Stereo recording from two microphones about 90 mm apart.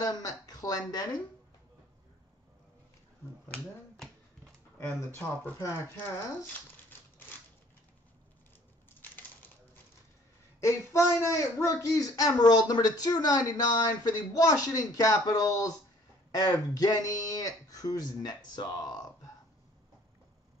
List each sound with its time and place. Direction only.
0.0 s a sound: 45° left (ahead or behind)
3.4 s finger snapping: 15° left (ahead or behind)
4.7 s speech: 25° left (ahead or behind)
6.1 s crumpling: 20° left (ahead or behind)
9.0 s typewriter: 20° left (ahead or behind)
10.6 s speech: 30° left (ahead or behind)